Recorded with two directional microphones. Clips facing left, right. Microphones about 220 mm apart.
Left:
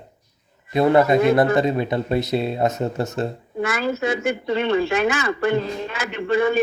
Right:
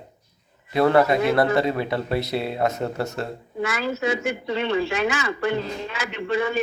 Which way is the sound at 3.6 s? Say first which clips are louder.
Left 2 dB; 50° left (ahead or behind).